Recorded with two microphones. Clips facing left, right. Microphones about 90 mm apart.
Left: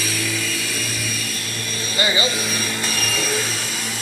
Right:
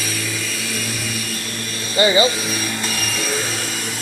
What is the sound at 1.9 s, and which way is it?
Vehicle, 30° right (ahead or behind).